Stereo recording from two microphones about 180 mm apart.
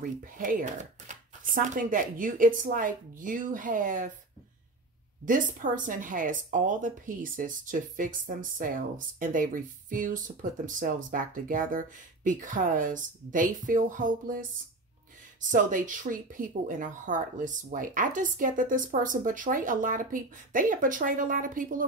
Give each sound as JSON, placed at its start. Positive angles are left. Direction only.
{"t": 0.0, "sound": "speech", "side_deg": -50}
{"t": 5.2, "sound": "speech", "side_deg": -45}
{"t": 15.4, "sound": "speech", "side_deg": -45}